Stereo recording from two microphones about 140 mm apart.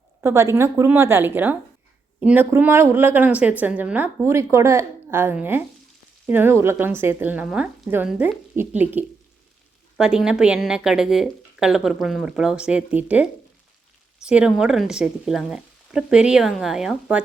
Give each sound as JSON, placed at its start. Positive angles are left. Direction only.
{"t": 0.2, "sound": "a woman's voice", "side_deg": -20}